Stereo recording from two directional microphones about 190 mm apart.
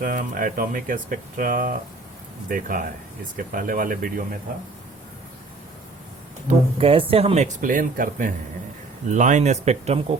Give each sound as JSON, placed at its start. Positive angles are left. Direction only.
{"t": 0.0, "sound": "speech", "side_deg": -45}
{"t": 6.7, "sound": "speech", "side_deg": -30}